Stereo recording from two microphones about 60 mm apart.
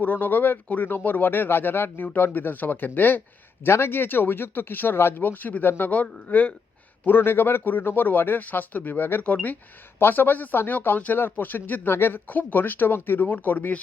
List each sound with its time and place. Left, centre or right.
0.0 s speech: left
3.6 s a man's voice: left
7.0 s a man's voice: left